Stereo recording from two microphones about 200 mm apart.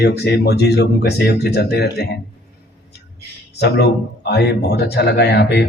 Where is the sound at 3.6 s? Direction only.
55° left (ahead or behind).